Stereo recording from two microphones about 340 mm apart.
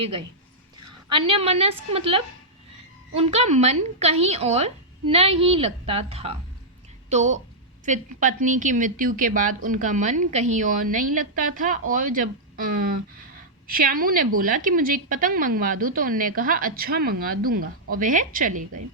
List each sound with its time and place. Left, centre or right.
1.1 s a woman's voice: centre